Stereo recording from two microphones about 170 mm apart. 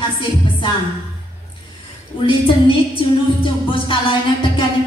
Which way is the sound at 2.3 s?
30° left (ahead or behind).